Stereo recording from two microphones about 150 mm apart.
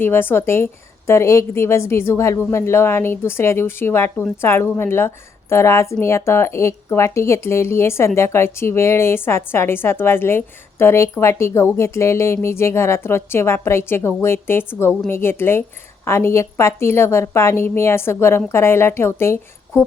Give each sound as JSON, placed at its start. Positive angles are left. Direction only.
{"t": 0.0, "sound": "a woman's voice", "side_deg": 15}